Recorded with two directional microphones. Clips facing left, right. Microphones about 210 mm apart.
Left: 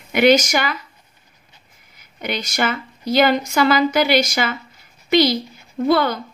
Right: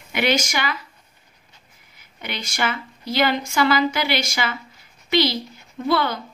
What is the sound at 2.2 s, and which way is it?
Speech, 45° left (ahead or behind).